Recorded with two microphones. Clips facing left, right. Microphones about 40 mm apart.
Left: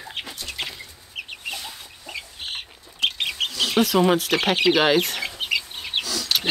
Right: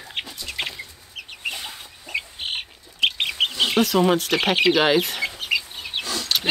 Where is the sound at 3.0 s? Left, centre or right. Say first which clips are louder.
Right 3 dB; right.